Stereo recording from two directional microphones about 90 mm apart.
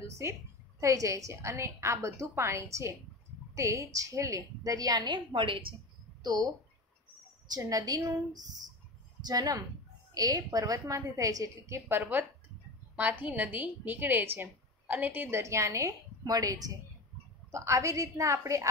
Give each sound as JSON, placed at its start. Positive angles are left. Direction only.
{"t": 0.0, "sound": "a woman's voice", "side_deg": -30}
{"t": 6.2, "sound": "a woman's voice", "side_deg": -50}
{"t": 12.0, "sound": "a woman's voice", "side_deg": -20}